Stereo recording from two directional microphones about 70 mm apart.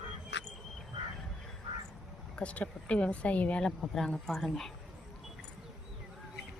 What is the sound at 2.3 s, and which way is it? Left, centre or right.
Speech, centre.